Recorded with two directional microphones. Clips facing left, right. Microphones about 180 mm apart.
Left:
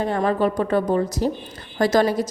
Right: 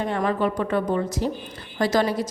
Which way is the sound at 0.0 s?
35° left (ahead or behind).